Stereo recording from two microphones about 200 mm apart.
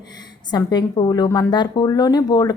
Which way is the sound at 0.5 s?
20° left (ahead or behind).